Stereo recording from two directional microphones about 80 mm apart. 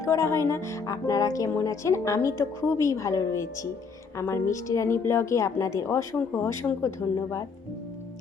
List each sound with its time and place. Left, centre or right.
0.0 s speech: left